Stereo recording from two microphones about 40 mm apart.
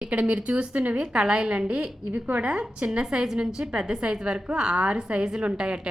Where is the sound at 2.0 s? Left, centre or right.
Right.